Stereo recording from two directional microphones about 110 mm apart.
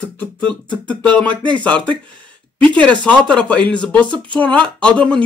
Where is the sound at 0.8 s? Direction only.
10° left (ahead or behind).